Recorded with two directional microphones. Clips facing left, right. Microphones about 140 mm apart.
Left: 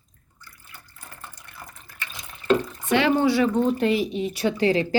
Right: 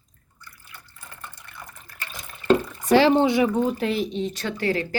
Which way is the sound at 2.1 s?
35° right (ahead or behind).